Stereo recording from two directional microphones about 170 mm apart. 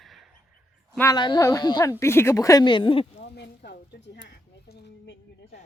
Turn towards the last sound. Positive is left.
turn(degrees=85)